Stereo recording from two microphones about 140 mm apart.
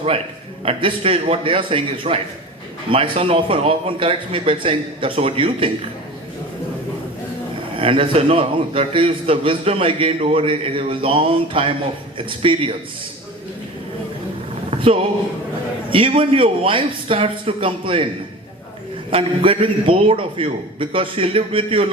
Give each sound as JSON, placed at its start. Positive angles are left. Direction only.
{"t": 0.6, "sound": "a man's voice", "side_deg": -40}
{"t": 7.8, "sound": "a man's voice", "side_deg": -40}
{"t": 14.7, "sound": "a sound", "side_deg": -40}
{"t": 15.9, "sound": "a man's voice", "side_deg": -40}
{"t": 19.1, "sound": "a man's voice", "side_deg": -40}